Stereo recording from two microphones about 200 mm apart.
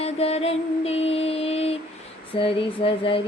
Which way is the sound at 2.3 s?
25° left (ahead or behind).